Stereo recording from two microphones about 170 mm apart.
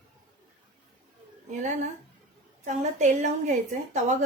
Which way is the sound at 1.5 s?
45° right (ahead or behind).